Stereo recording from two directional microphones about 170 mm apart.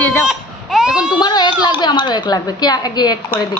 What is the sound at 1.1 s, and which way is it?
A woman's voice, 25° left (ahead or behind).